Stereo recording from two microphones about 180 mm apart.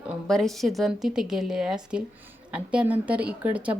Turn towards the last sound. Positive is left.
turn(degrees=-10)  # may be behind; listen again after turning